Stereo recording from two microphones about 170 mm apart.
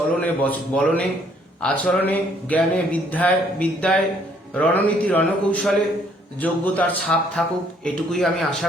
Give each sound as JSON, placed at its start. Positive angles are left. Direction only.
{"t": 0.2, "sound": "a man's voice", "side_deg": 10}